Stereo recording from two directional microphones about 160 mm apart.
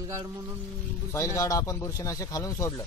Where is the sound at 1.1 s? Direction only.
20° left (ahead or behind).